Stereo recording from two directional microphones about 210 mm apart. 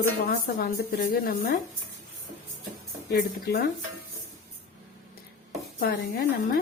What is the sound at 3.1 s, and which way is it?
Speech, 45° left (ahead or behind).